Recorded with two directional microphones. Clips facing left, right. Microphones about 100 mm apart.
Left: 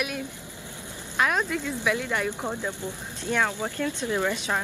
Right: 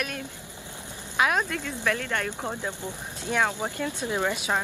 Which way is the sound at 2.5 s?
15° right (ahead or behind).